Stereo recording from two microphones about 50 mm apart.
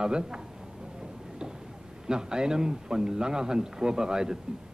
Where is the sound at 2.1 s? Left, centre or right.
Centre.